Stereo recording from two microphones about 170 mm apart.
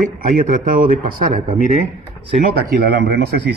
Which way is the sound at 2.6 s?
70° right (ahead or behind).